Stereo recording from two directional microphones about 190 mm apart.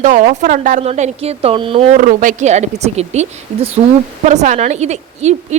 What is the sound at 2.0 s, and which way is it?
A woman's voice, 45° right (ahead or behind).